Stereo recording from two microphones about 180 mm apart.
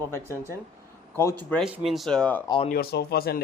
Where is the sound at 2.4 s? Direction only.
25° left (ahead or behind).